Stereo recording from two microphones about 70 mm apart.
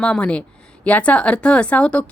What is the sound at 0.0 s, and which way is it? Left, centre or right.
A woman's voice, centre.